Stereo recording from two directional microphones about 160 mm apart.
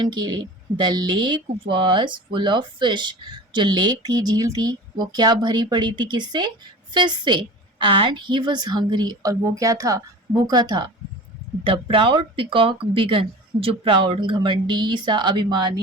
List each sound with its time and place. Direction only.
0.0 s speech: 25° right (ahead or behind)